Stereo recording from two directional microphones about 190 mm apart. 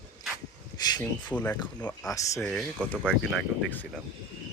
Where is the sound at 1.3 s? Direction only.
10° left (ahead or behind).